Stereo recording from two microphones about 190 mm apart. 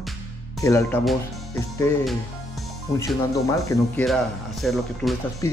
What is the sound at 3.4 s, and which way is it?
Speech, 15° left (ahead or behind).